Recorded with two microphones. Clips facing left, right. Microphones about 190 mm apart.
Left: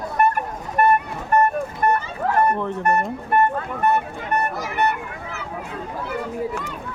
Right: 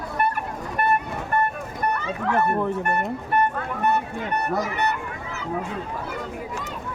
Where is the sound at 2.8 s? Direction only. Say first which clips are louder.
Left 4 dB; 40° left (ahead or behind).